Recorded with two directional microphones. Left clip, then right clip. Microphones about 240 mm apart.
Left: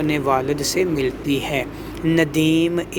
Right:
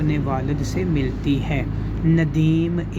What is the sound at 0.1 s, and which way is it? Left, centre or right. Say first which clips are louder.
Speech: left 6 dB; left.